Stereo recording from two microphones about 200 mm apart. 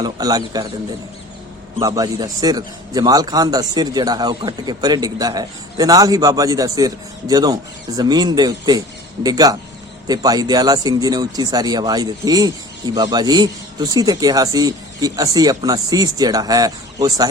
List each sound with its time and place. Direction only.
0.0 s speech: 20° right (ahead or behind)
1.7 s speech: 20° right (ahead or behind)